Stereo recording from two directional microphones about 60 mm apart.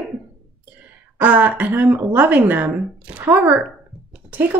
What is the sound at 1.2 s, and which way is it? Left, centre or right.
Speech, right.